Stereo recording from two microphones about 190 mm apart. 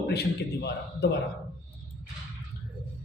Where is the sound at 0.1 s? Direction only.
60° left (ahead or behind).